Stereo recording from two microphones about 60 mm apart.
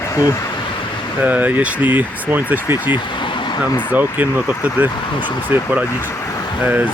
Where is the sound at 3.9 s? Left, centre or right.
Right.